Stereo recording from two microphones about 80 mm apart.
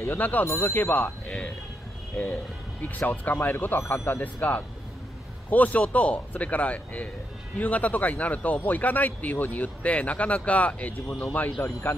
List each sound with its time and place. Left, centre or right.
0.2 s a man's voice: left
3.1 s a man's voice: left
11.6 s speech: left